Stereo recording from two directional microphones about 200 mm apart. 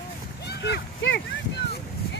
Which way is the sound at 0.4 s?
55° left (ahead or behind).